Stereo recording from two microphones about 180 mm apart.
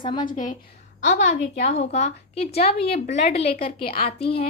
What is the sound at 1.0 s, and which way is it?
A woman's voice, 45° left (ahead or behind).